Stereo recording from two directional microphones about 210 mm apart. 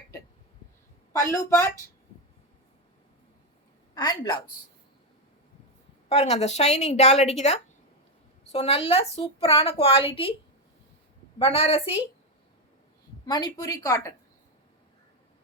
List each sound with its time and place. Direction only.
1.1 s a woman's voice: 15° left (ahead or behind)
3.9 s a woman's voice: 20° left (ahead or behind)
6.1 s a woman's voice: 30° left (ahead or behind)
11.3 s a woman's voice: 25° left (ahead or behind)
13.2 s a woman's voice: 20° left (ahead or behind)